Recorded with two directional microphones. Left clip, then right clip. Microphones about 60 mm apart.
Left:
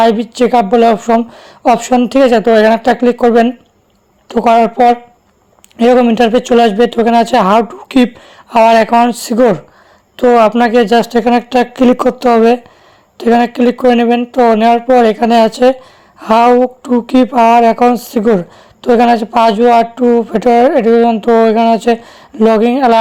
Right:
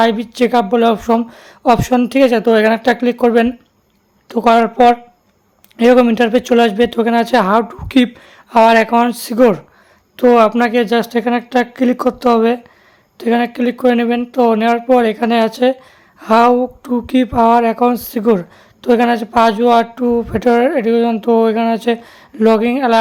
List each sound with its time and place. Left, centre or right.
0.0 s a woman's voice: left
5.7 s a man's voice: centre
8.9 s a woman's voice: centre
10.6 s speech: left
11.1 s speech: left
11.4 s speech: left
11.9 s a woman's voice: left
17.5 s a woman's voice: left